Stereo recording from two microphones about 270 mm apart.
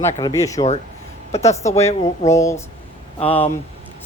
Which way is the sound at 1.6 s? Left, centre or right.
Centre.